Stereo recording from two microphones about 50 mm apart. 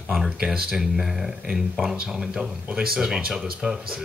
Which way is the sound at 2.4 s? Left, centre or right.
Centre.